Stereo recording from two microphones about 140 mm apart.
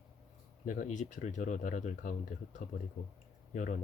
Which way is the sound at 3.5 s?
65° left (ahead or behind).